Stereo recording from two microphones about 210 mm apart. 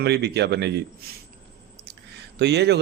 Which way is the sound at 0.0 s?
50° right (ahead or behind).